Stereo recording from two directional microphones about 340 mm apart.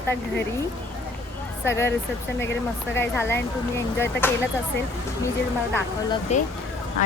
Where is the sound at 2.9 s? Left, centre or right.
Centre.